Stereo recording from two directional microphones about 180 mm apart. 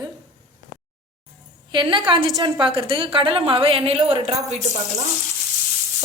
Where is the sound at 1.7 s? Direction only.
25° right (ahead or behind).